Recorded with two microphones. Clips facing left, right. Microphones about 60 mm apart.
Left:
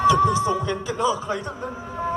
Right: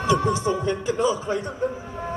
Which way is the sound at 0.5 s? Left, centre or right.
Right.